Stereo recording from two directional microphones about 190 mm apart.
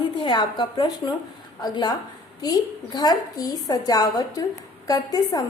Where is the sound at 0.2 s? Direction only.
25° left (ahead or behind).